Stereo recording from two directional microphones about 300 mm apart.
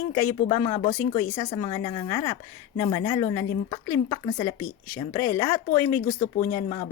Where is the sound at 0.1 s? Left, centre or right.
Centre.